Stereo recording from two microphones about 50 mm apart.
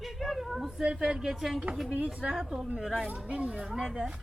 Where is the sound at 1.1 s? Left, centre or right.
Centre.